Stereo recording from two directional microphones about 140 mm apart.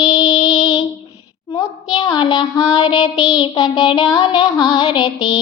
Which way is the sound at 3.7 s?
30° left (ahead or behind).